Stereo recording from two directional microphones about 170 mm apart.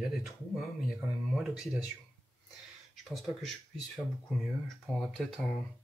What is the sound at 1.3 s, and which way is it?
Speech, centre (ahead or behind).